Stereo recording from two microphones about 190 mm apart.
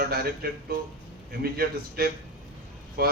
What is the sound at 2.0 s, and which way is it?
Speech, 55° right (ahead or behind).